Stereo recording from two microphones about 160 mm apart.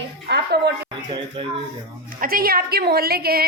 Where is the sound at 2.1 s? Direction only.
65° right (ahead or behind).